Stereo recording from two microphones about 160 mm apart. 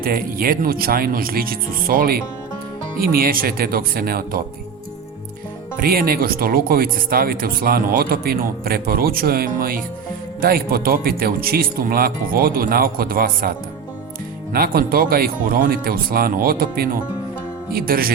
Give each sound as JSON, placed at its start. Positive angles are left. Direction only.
{"t": 0.0, "sound": "speech", "side_deg": -65}
{"t": 5.7, "sound": "speech", "side_deg": -60}
{"t": 14.5, "sound": "speech", "side_deg": -65}